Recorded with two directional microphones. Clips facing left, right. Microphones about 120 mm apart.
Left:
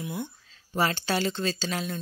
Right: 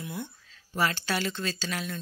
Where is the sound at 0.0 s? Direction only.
20° left (ahead or behind).